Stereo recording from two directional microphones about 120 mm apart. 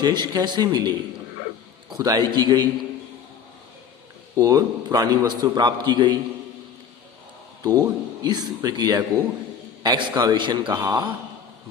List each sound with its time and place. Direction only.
0.0 s a man's voice: 35° right (ahead or behind)
2.0 s a man's voice: 35° right (ahead or behind)
4.4 s a man's voice: 30° right (ahead or behind)
7.6 s a man's voice: 35° right (ahead or behind)